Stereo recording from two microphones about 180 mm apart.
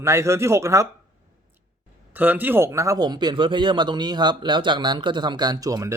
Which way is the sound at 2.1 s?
10° right (ahead or behind).